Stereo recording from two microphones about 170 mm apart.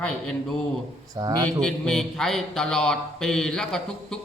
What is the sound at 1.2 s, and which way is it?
Speech, 25° right (ahead or behind).